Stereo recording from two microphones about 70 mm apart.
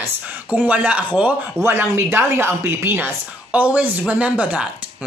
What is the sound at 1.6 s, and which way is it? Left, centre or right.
Speech, right.